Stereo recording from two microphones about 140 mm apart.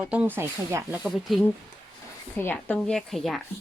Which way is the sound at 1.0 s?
Centre (ahead or behind).